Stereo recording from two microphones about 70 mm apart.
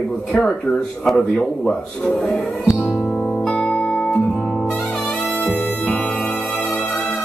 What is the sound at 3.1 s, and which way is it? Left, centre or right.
Music, centre.